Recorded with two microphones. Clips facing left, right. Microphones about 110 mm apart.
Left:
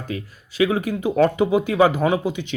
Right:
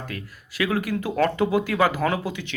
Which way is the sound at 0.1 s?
20° left (ahead or behind).